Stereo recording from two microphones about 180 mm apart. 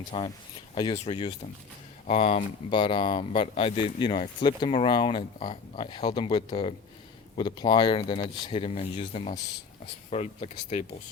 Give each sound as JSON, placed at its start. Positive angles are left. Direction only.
{"t": 0.1, "sound": "speech", "side_deg": 30}